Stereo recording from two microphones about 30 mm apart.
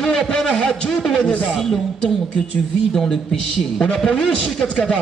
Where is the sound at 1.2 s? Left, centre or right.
Left.